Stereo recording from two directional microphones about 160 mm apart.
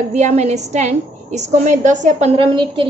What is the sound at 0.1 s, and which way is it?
A woman's voice, 45° right (ahead or behind).